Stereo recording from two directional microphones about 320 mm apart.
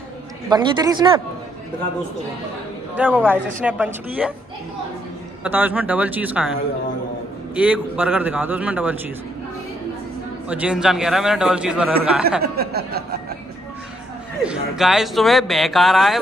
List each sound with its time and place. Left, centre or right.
0.5 s a woman's voice: centre
3.0 s speech: centre
5.4 s speech: centre
7.5 s speech: centre
10.5 s speech: centre
12.4 s chuckle: right
14.4 s speech: centre